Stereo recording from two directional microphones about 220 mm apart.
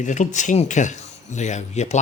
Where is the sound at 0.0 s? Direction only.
35° left (ahead or behind).